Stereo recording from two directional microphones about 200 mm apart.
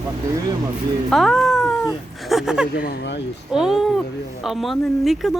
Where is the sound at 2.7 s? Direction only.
55° left (ahead or behind).